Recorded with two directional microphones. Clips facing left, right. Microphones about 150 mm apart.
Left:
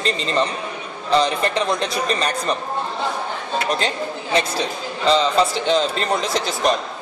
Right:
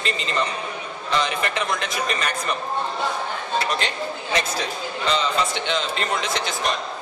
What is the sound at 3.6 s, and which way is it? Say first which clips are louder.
A man's voice: left 3 dB; 35° left (ahead or behind).